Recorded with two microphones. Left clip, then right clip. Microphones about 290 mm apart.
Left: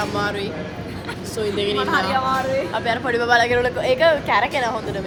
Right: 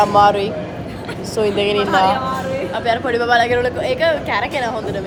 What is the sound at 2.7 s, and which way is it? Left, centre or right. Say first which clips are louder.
A woman's voice: right 3 dB; centre.